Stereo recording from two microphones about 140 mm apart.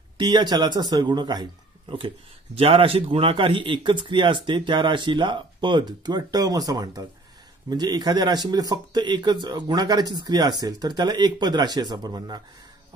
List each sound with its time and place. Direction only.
0.2 s a man's voice: 30° right (ahead or behind)